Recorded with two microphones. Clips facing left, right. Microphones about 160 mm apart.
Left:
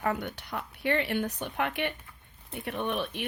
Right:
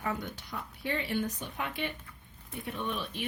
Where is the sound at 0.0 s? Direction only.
60° left (ahead or behind).